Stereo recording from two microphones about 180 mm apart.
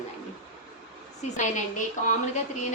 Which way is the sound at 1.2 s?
40° left (ahead or behind).